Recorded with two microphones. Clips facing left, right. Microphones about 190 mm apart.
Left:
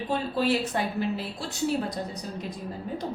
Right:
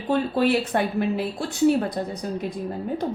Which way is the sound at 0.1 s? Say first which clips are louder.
Right 6 dB; 60° right (ahead or behind).